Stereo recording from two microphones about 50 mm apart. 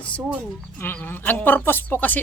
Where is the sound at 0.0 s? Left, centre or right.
Left.